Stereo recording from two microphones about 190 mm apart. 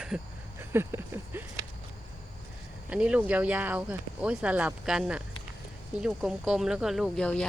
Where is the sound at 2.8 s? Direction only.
5° right (ahead or behind).